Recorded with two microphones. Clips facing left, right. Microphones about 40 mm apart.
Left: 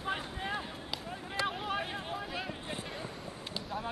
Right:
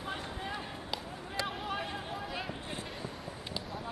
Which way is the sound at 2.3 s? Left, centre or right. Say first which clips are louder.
Even; centre.